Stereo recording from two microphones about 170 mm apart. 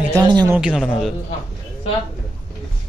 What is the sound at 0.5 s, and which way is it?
Speech, 5° right (ahead or behind).